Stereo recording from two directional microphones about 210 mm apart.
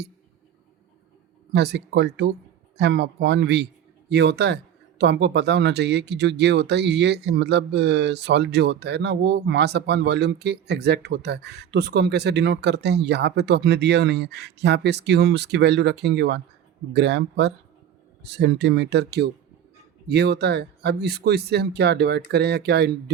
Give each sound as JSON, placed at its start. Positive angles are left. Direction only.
{"t": 1.5, "sound": "speech", "side_deg": -55}